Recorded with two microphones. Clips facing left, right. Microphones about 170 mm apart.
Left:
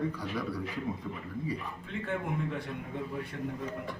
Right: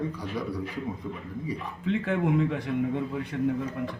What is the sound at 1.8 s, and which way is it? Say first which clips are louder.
Speech: right 9 dB; 90° right.